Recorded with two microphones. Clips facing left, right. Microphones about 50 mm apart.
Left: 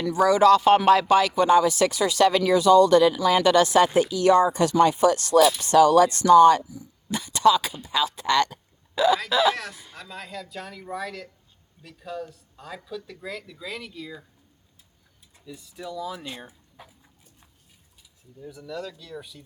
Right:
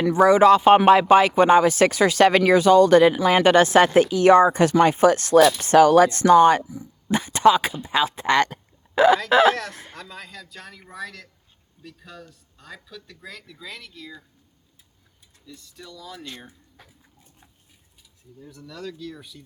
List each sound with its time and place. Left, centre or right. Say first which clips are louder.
0.0 s speech: right 3 dB; right
9.9 s speech: left 1 dB; centre
15.4 s speech: left 6 dB; centre
18.4 s speech: left 2 dB; centre